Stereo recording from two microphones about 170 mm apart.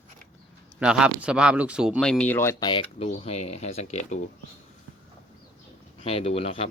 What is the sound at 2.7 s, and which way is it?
Speech, 35° left (ahead or behind).